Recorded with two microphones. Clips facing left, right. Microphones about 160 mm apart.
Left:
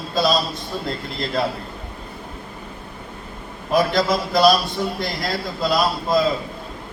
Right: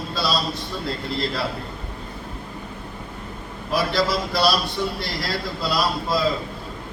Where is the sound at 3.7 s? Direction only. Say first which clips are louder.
Left 4 dB; 45° left (ahead or behind).